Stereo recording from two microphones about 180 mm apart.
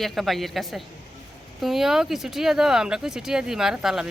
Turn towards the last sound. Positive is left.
turn(degrees=0)  # may be behind; listen again after turning